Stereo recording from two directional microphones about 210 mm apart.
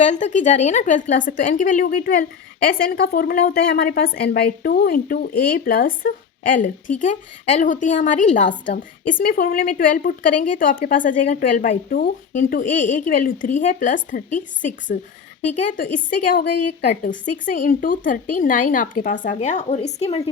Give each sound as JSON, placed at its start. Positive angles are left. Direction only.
{"t": 0.0, "sound": "a woman's voice", "side_deg": 35}